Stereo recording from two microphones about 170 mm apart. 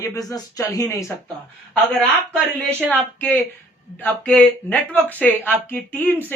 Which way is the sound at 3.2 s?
10° left (ahead or behind).